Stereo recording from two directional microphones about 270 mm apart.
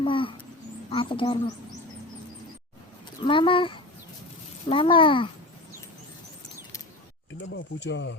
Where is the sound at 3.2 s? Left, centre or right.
Centre.